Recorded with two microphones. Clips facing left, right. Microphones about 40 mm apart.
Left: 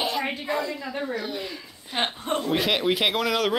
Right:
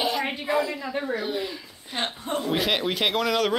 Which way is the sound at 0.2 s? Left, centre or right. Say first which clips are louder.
Right 2 dB; centre.